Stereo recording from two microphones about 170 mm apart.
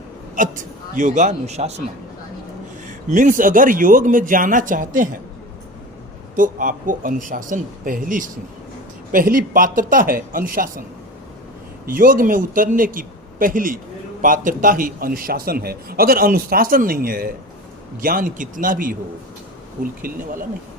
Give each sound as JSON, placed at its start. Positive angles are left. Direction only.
{"t": 0.3, "sound": "speech", "side_deg": -50}
{"t": 3.1, "sound": "speech", "side_deg": -50}
{"t": 6.3, "sound": "a man's voice", "side_deg": -50}
{"t": 11.9, "sound": "a man's voice", "side_deg": -55}